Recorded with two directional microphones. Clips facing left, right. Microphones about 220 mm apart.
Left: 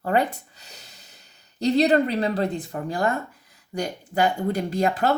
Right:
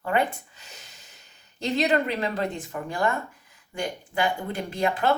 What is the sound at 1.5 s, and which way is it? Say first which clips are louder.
Speech: left 5 dB; 35° left (ahead or behind).